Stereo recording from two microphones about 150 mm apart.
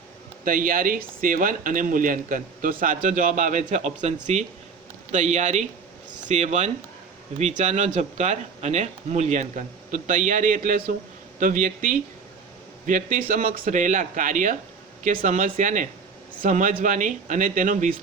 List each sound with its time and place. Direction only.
0.4 s speech: 70° right (ahead or behind)